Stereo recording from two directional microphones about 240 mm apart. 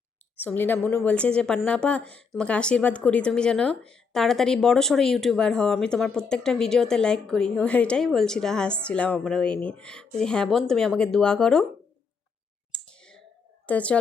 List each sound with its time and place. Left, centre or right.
0.3 s a woman's voice: centre
12.7 s clicking: centre
13.7 s speech: centre